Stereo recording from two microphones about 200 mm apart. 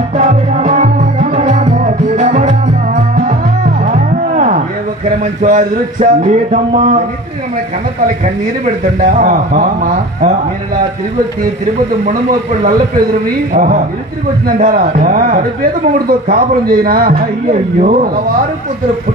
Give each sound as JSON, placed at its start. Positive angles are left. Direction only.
{"t": 0.2, "sound": "music", "side_deg": -40}
{"t": 5.2, "sound": "speech", "side_deg": -40}
{"t": 9.0, "sound": "speech", "side_deg": -40}
{"t": 12.0, "sound": "a man's voice", "side_deg": -45}